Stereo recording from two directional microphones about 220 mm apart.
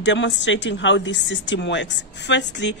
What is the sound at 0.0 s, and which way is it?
Speech, 55° left (ahead or behind).